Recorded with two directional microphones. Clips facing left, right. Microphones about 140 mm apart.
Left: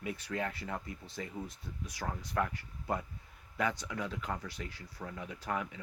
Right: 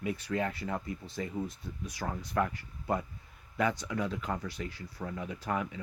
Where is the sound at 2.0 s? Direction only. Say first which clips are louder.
Right 3 dB; 10° right (ahead or behind).